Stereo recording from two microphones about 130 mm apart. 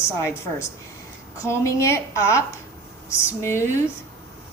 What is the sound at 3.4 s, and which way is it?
Speech, 20° left (ahead or behind).